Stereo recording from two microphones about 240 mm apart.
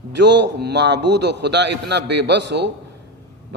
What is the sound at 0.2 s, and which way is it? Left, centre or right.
A man's voice, right.